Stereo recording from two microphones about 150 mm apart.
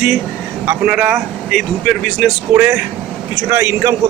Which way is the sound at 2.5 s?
10° right (ahead or behind).